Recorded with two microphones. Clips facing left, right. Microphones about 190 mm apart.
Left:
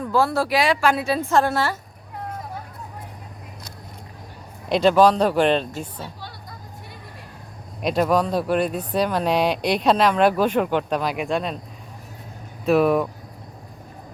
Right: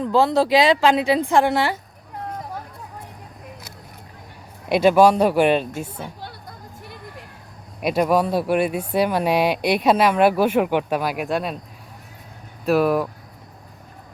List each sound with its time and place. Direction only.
0.0 s a woman's voice: 20° right (ahead or behind)
4.7 s speech: 10° right (ahead or behind)
7.8 s speech: 10° right (ahead or behind)
12.6 s speech: centre (ahead or behind)